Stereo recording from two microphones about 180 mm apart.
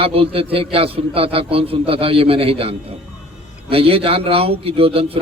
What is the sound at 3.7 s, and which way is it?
A man's voice, 30° right (ahead or behind).